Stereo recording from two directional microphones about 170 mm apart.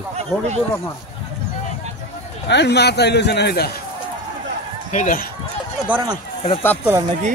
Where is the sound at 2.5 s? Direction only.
85° left.